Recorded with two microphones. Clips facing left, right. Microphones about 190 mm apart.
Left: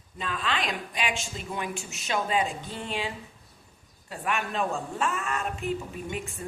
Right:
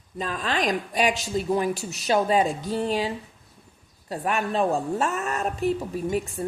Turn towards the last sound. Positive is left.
turn(degrees=-40)  # may be behind; listen again after turning